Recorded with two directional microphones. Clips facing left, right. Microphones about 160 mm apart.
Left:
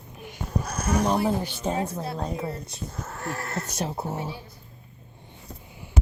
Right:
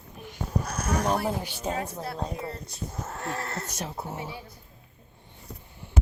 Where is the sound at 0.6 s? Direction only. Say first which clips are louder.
Left 3 dB; centre (ahead or behind).